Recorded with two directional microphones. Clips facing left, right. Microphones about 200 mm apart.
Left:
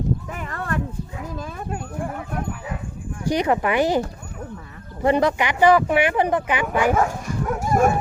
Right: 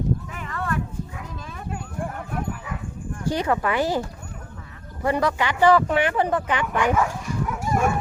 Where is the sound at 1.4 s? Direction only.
45° left (ahead or behind).